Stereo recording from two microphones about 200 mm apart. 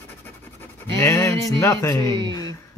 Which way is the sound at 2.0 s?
25° right (ahead or behind).